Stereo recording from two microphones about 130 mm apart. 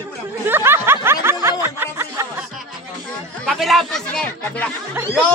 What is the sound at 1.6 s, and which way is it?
Music, 20° right (ahead or behind).